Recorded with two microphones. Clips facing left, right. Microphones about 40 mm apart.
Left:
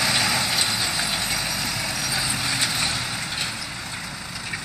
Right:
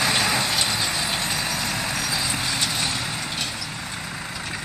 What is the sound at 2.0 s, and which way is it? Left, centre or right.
Clip-clop, centre.